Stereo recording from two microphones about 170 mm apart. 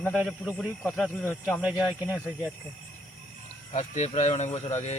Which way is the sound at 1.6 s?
10° right (ahead or behind).